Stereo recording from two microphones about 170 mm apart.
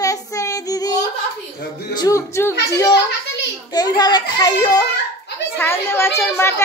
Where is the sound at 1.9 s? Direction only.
20° left (ahead or behind).